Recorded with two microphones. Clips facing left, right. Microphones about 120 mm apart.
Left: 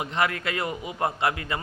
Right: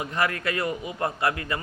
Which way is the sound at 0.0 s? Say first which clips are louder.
Even; 25° left (ahead or behind).